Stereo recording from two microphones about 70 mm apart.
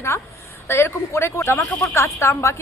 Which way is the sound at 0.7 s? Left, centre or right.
Left.